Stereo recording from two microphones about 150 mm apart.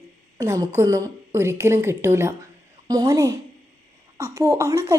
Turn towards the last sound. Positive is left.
turn(degrees=-20)  # may be behind; listen again after turning